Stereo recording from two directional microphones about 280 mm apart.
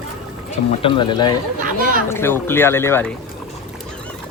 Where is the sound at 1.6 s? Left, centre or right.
Right.